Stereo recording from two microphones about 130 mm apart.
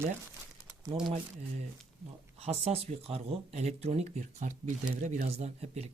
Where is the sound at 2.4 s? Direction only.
50° right (ahead or behind).